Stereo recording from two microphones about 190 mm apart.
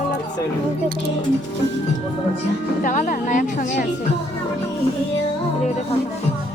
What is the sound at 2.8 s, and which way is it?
A woman's voice, 45° left (ahead or behind).